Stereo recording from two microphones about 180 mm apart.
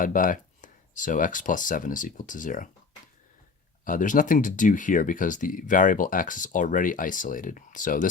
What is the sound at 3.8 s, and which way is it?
Speech, 45° left (ahead or behind).